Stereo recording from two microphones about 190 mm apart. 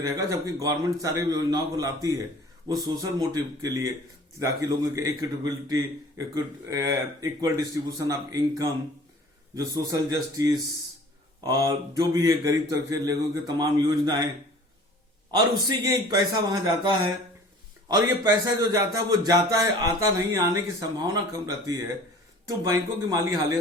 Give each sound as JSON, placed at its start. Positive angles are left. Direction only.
{"t": 0.0, "sound": "a man's voice", "side_deg": -15}
{"t": 15.3, "sound": "a man's voice", "side_deg": -20}